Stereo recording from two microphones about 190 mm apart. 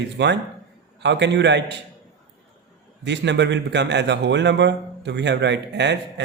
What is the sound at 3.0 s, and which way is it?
A man's voice, 65° right (ahead or behind).